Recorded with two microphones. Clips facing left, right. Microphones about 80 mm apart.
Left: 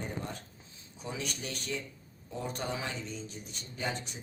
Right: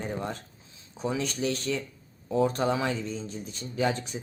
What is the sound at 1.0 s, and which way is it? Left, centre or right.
Speech, right.